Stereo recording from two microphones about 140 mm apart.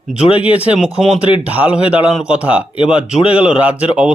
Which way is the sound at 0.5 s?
10° right (ahead or behind).